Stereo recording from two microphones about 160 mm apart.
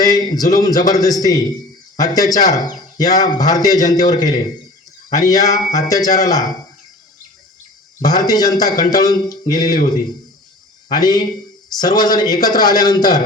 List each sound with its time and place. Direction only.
0.0 s speech: 25° left (ahead or behind)
8.3 s speech: 25° left (ahead or behind)
10.8 s a man's voice: 25° left (ahead or behind)